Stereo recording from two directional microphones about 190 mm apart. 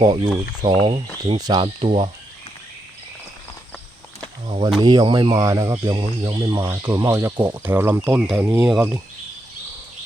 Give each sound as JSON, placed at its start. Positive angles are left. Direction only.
{"t": 0.0, "sound": "speech", "side_deg": -25}
{"t": 1.8, "sound": "speech", "side_deg": -30}
{"t": 4.8, "sound": "speech", "side_deg": -25}